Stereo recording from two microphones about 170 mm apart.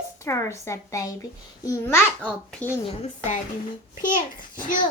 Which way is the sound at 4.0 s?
50° left (ahead or behind).